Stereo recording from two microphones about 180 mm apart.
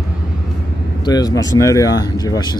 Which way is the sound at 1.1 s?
20° left (ahead or behind).